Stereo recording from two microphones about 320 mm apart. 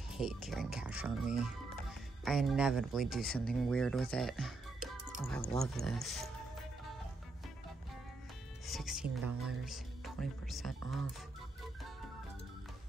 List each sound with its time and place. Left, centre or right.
0.1 s speech: centre
8.6 s speech: centre